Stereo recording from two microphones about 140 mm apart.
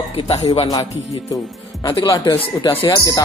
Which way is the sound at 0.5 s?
25° left (ahead or behind).